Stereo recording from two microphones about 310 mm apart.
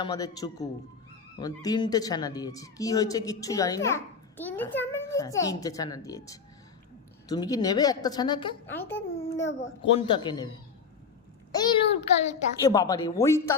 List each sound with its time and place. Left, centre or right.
0.0 s speech: centre
9.5 s speech: centre
11.5 s speech: centre